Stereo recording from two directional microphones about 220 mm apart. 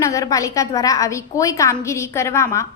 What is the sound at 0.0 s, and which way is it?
A woman's voice, 15° left (ahead or behind).